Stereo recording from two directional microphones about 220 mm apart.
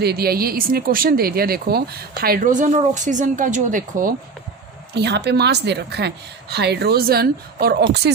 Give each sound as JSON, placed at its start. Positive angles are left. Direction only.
{"t": 0.0, "sound": "speech", "side_deg": -45}
{"t": 4.9, "sound": "a woman's voice", "side_deg": -50}